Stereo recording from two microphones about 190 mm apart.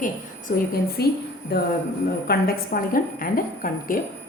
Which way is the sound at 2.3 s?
50° left (ahead or behind).